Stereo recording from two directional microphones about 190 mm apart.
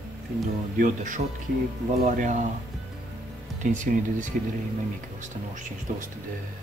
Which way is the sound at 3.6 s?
40° right (ahead or behind).